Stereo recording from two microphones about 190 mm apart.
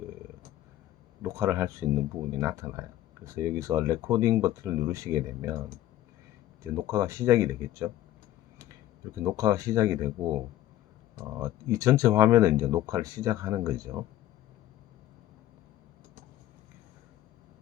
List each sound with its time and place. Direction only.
1.2 s speech: 15° right (ahead or behind)
9.2 s speech: 15° right (ahead or behind)